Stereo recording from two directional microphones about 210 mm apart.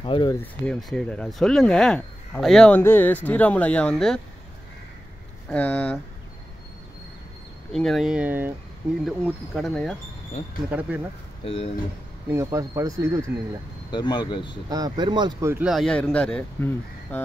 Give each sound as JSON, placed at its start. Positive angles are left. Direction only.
{"t": 0.0, "sound": "speech", "side_deg": 25}
{"t": 0.4, "sound": "speech", "side_deg": 0}
{"t": 5.5, "sound": "speech", "side_deg": 5}
{"t": 7.7, "sound": "speech", "side_deg": 0}
{"t": 11.4, "sound": "speech", "side_deg": 30}
{"t": 12.3, "sound": "speech", "side_deg": -15}
{"t": 13.9, "sound": "speech", "side_deg": 20}
{"t": 14.7, "sound": "speech", "side_deg": -20}
{"t": 15.5, "sound": "speech", "side_deg": -5}